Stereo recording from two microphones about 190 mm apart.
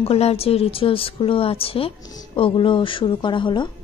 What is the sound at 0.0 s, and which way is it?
Speech, 30° left (ahead or behind).